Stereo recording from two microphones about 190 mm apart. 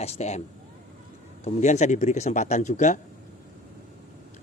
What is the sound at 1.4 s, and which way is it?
Speech, 35° left (ahead or behind).